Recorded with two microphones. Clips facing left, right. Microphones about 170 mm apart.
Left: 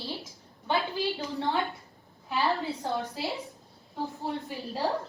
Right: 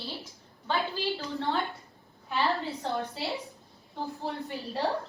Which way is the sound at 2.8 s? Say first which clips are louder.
Even; centre (ahead or behind).